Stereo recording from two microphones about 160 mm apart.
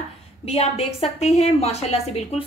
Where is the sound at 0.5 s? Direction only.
40° left (ahead or behind).